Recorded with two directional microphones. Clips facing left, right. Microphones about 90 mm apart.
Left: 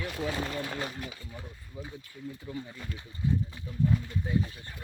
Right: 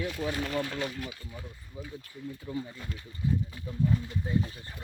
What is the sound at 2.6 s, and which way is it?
Speech, centre (ahead or behind).